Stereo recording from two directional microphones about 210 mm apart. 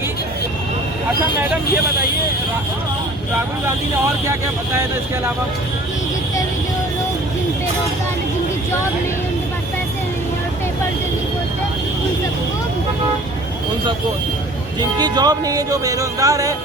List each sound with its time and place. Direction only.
14.8 s music: 20° right (ahead or behind)